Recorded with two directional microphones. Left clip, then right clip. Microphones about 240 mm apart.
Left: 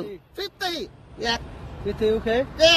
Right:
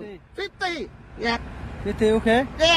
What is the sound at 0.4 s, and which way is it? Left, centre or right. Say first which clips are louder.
Speech: right 1 dB; centre.